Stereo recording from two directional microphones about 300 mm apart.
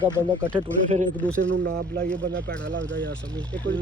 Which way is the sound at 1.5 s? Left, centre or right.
Right.